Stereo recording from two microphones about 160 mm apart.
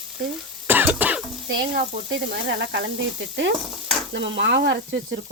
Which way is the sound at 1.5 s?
75° right (ahead or behind).